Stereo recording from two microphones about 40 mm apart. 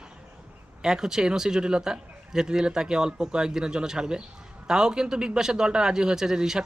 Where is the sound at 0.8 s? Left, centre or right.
Centre.